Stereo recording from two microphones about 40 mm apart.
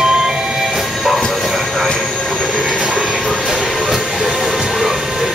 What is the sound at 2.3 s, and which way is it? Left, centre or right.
Train, left.